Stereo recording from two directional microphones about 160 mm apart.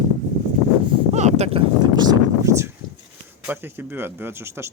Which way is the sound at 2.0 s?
20° right (ahead or behind).